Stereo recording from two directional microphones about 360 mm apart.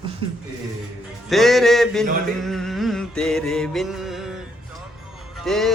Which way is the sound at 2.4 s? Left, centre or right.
Centre.